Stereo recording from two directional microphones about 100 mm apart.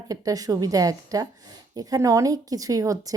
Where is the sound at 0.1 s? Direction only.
35° right (ahead or behind).